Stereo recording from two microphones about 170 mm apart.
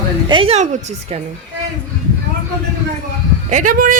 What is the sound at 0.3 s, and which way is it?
Speech, 30° right (ahead or behind).